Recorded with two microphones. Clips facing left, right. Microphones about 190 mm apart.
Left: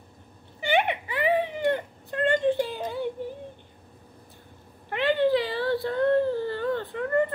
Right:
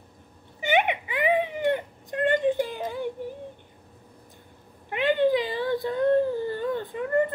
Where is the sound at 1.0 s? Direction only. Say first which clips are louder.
Even; 15° right (ahead or behind).